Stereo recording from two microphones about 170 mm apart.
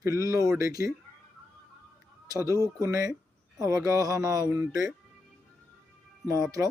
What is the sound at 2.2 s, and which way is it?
Speech, 20° right (ahead or behind).